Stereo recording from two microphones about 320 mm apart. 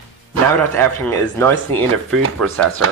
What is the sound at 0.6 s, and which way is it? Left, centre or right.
Speech, centre.